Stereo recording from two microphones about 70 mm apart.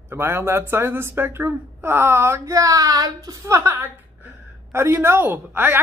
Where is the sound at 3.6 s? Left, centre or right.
Right.